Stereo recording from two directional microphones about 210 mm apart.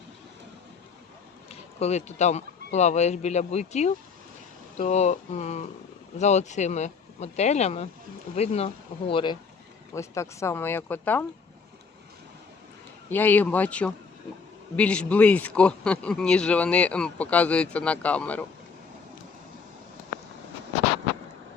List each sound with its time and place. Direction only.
1.5 s speech: 30° left (ahead or behind); by 11.3 s 10° left (ahead or behind)
13.1 s speech: 10° left (ahead or behind)